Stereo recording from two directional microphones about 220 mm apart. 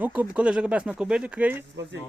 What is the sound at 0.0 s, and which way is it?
Speech, 5° right (ahead or behind).